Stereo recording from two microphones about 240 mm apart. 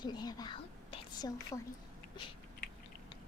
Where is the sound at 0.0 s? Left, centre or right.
Centre.